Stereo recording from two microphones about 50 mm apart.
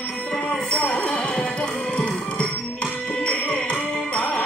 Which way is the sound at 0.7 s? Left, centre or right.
Left.